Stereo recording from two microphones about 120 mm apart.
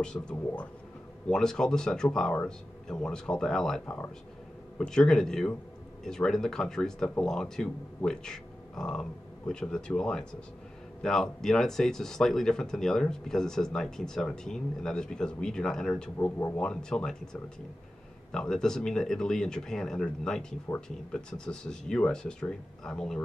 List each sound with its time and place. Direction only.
0.0 s speech: 5° left (ahead or behind)
1.2 s speech: 5° left (ahead or behind)
3.8 s speech: 15° left (ahead or behind)
20.7 s speech: 20° left (ahead or behind)
21.1 s speech: 5° left (ahead or behind)